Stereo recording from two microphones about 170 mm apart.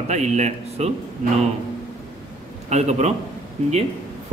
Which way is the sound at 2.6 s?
40° right (ahead or behind).